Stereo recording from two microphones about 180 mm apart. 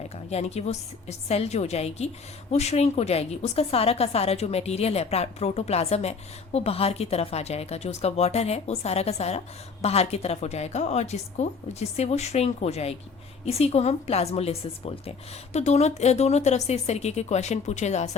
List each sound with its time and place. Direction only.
0.3 s a woman's voice: 35° left (ahead or behind)